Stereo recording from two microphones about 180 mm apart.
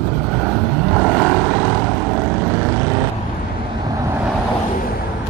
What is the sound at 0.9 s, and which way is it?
Vehicle, 5° left (ahead or behind).